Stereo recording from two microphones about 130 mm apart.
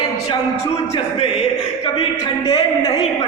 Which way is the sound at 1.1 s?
45° left (ahead or behind).